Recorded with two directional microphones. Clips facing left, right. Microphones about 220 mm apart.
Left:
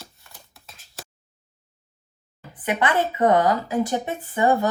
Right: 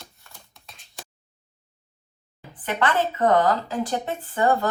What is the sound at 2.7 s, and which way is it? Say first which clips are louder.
A woman's voice: left 1 dB; 10° left (ahead or behind).